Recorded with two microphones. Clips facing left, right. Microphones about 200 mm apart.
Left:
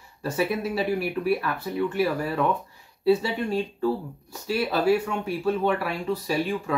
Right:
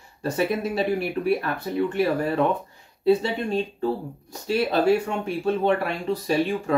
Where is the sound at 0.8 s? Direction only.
25° right (ahead or behind).